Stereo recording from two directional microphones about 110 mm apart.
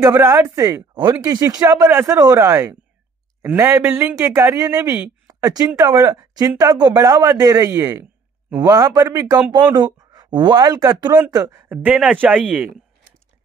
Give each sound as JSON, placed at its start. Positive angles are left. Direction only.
{"t": 0.0, "sound": "a woman's voice", "side_deg": -25}
{"t": 1.9, "sound": "speech", "side_deg": -20}
{"t": 2.1, "sound": "speech", "side_deg": -30}
{"t": 5.2, "sound": "a sound", "side_deg": -35}
{"t": 5.8, "sound": "a woman's voice", "side_deg": -30}
{"t": 9.5, "sound": "a woman's voice", "side_deg": -40}
{"t": 11.7, "sound": "speech", "side_deg": -15}